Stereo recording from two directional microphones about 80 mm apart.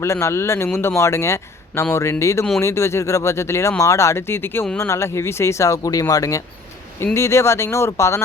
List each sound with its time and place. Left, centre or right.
0.0 s speech: left